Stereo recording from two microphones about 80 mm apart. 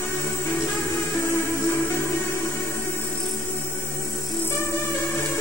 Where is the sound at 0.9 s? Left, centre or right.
Left.